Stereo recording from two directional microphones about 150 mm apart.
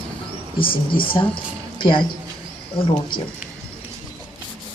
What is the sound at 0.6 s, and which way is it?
Speech, 35° left (ahead or behind).